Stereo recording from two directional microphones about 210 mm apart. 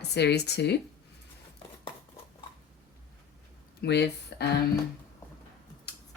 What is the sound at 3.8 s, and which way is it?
Speech, 55° left (ahead or behind).